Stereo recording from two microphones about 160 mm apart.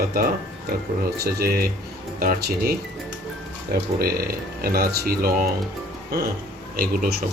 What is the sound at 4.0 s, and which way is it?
Speech, 70° right (ahead or behind).